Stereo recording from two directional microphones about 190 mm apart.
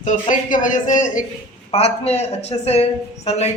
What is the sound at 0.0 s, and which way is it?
Speech, 40° left (ahead or behind).